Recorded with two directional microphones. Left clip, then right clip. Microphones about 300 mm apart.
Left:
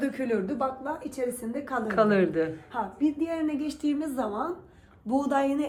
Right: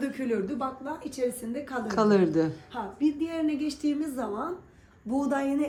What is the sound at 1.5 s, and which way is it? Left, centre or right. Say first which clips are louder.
Speech: left 2 dB; centre.